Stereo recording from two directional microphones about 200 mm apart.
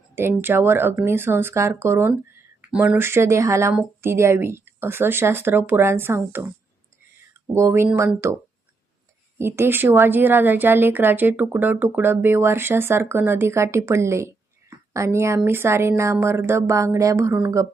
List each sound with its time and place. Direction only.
0.2 s a woman's voice: 10° right (ahead or behind)
9.4 s a woman's voice: 10° right (ahead or behind)